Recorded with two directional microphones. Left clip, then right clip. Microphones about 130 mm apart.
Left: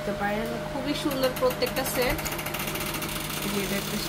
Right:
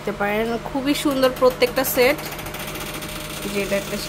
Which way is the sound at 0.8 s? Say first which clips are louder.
Right 8 dB; 60° right (ahead or behind).